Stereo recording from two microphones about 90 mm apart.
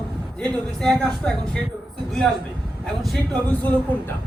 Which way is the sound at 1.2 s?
5° left (ahead or behind).